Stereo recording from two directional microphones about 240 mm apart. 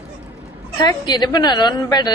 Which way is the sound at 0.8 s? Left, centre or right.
Centre.